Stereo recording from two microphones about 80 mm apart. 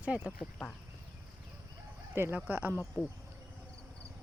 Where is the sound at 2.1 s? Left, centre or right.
Right.